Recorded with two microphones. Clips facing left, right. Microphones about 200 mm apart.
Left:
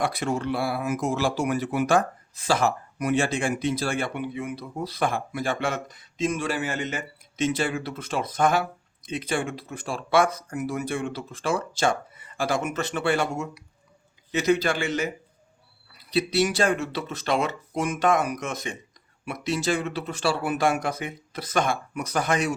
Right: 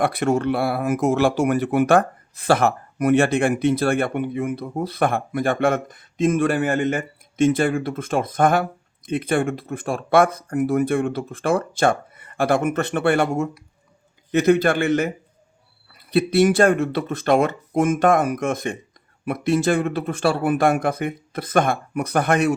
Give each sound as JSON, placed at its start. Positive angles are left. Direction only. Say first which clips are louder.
{"t": 0.0, "sound": "speech", "louder": "right 7 dB", "side_deg": -60}